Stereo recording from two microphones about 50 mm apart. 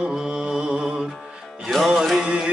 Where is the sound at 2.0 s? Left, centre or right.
Centre.